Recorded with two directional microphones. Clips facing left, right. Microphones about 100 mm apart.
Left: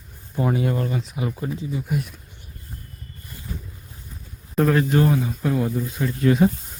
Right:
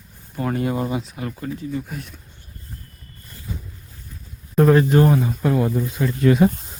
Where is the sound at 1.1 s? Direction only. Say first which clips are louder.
Left 1 dB; 15° left (ahead or behind).